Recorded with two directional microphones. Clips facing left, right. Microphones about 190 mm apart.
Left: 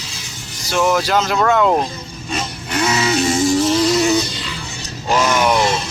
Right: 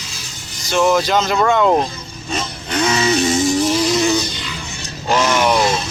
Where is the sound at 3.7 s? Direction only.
Centre (ahead or behind).